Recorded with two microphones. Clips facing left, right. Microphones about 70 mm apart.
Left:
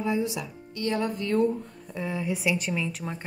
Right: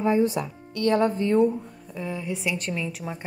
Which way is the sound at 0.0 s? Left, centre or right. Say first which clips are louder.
Right 6 dB; right.